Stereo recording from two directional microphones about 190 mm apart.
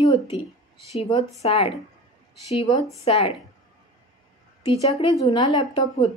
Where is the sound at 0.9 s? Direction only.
35° left (ahead or behind).